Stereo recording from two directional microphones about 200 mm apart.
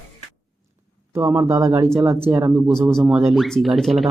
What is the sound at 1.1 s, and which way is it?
Speech, 15° right (ahead or behind).